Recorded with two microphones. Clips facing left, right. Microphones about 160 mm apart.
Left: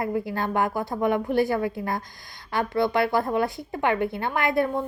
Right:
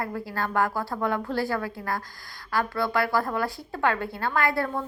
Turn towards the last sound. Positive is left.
turn(degrees=20)  # may be behind; listen again after turning